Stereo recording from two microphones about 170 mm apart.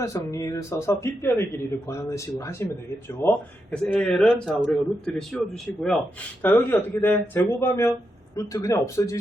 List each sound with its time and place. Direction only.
0.0 s speech: 20° left (ahead or behind)